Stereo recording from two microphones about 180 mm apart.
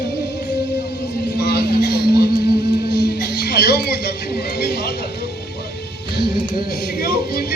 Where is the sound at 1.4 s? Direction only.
65° left (ahead or behind).